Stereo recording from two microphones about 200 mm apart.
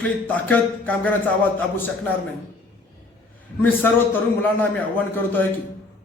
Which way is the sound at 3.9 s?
10° left (ahead or behind).